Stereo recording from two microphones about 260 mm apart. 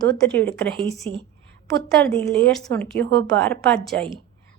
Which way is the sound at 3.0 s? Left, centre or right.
Right.